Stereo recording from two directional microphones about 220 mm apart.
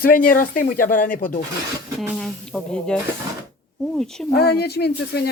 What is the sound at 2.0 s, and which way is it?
Speech, centre (ahead or behind).